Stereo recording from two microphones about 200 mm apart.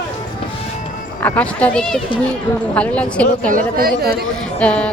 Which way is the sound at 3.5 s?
45° right (ahead or behind).